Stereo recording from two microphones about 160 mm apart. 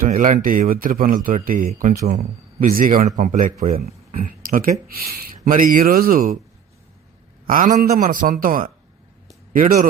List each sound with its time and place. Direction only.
0.0 s speech: 60° right (ahead or behind)
7.4 s speech: 60° right (ahead or behind)